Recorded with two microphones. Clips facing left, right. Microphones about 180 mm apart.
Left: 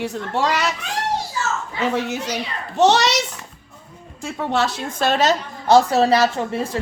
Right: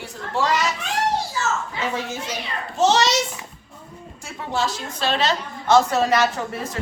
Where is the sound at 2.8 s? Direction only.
65° left (ahead or behind).